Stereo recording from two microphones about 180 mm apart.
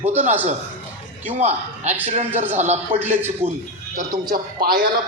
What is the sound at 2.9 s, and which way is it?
Speech, 10° right (ahead or behind).